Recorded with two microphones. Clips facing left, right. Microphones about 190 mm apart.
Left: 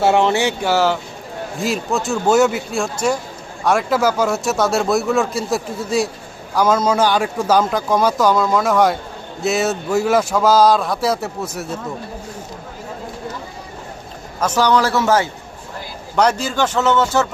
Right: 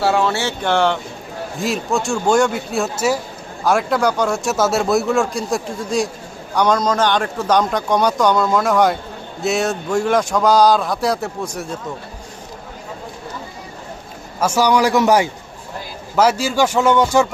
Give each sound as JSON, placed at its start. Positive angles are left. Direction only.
{"t": 0.0, "sound": "speech", "side_deg": 20}
{"t": 14.4, "sound": "speech", "side_deg": -10}